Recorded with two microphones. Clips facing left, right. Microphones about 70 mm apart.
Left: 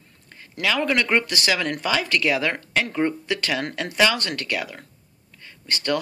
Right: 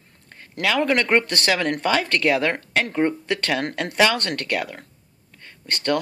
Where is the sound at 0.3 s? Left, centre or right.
Right.